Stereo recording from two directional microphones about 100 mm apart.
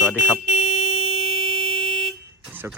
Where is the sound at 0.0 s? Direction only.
15° right (ahead or behind).